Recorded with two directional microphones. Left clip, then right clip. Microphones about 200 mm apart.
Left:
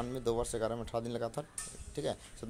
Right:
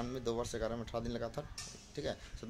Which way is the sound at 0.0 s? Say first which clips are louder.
Left 4 dB; 15° left (ahead or behind).